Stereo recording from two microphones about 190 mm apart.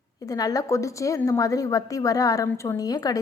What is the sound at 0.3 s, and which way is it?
A woman's voice, 20° left (ahead or behind).